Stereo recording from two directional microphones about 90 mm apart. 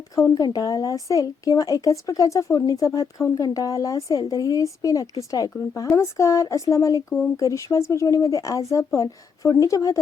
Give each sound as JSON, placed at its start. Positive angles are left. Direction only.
{"t": 0.3, "sound": "speech", "side_deg": 45}